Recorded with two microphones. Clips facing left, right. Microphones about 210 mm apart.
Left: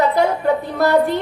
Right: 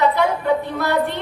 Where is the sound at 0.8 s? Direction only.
40° left (ahead or behind).